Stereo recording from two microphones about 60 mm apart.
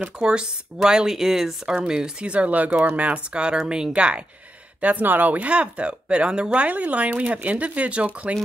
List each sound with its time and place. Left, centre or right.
0.0 s speech: centre
4.8 s speech: right